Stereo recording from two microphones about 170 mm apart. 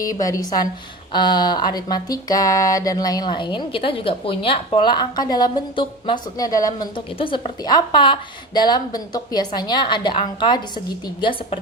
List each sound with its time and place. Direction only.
0.0 s speech: 20° left (ahead or behind)